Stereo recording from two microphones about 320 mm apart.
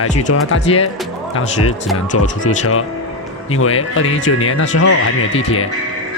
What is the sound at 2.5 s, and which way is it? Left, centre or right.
Speech, left.